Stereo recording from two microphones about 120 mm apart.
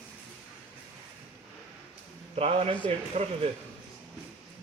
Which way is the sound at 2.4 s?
60° right (ahead or behind).